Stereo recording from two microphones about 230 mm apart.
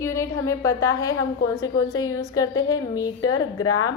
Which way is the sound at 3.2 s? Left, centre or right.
Left.